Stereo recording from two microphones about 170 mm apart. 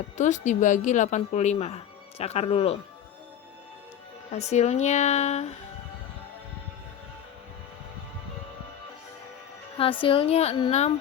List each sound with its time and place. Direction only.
0.2 s speech: 45° left (ahead or behind)
4.3 s speech: 40° left (ahead or behind)
9.7 s speech: 30° left (ahead or behind)